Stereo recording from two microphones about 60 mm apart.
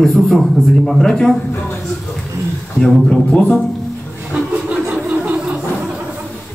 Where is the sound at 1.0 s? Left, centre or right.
Centre.